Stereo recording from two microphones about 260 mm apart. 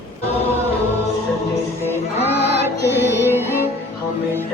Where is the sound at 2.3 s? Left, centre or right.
Left.